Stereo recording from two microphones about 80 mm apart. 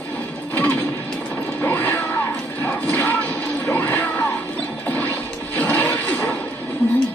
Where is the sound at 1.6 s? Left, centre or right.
Left.